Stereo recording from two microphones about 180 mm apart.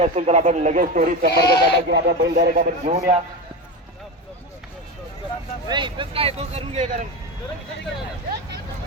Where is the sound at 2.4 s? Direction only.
55° right (ahead or behind).